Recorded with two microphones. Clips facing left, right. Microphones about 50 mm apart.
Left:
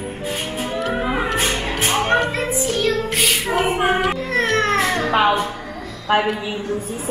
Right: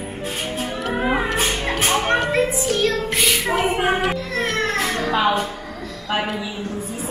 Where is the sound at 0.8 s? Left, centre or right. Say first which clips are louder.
Right 2 dB; centre.